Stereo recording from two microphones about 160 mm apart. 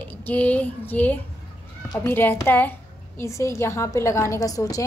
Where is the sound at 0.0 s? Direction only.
10° left (ahead or behind).